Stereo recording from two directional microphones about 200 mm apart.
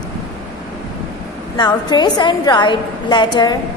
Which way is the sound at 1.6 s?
20° left (ahead or behind).